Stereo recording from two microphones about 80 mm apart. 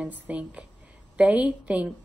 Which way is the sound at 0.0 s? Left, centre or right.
Centre.